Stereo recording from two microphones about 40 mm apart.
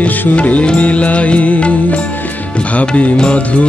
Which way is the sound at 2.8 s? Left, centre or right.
Left.